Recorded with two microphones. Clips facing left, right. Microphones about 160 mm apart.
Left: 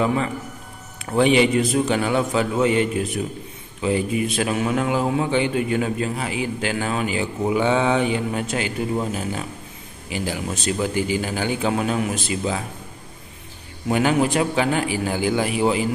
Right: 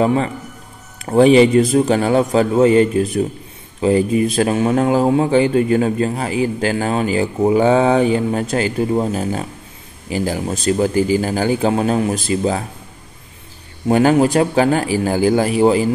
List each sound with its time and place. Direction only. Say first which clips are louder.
0.0 s a man's voice: right 5 dB; 35° right (ahead or behind)
13.8 s a man's voice: right 6 dB; 40° right (ahead or behind)